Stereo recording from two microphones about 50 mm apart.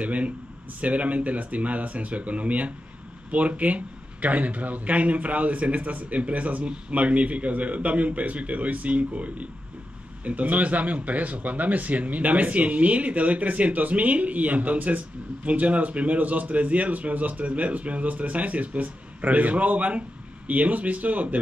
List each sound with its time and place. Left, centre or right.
0.0 s speech: right